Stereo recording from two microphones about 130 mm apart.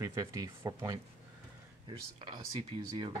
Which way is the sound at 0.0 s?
25° right (ahead or behind).